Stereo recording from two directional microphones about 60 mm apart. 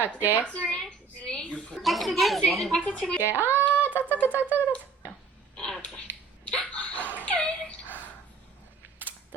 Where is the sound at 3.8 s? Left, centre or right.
Right.